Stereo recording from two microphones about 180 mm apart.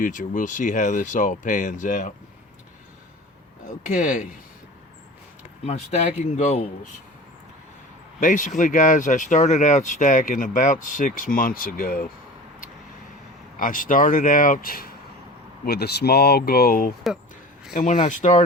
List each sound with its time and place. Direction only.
0.0 s speech: 45° left (ahead or behind)
3.7 s speech: 45° left (ahead or behind)
5.6 s speech: 40° left (ahead or behind)
8.2 s speech: 45° left (ahead or behind)
13.6 s speech: 50° left (ahead or behind)
17.7 s speech: 40° left (ahead or behind)